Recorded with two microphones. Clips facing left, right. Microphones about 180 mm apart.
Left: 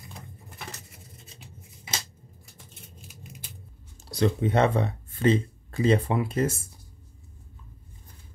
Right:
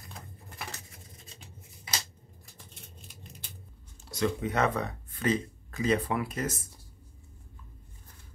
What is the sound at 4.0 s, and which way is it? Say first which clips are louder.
Speech: left 5 dB; 35° left (ahead or behind).